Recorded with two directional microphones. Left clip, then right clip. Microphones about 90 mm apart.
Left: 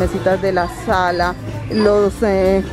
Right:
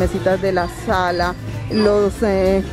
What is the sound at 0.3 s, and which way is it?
Speech, 15° left (ahead or behind).